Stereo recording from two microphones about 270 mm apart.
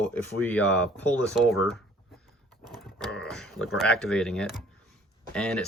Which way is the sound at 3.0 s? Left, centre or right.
Centre.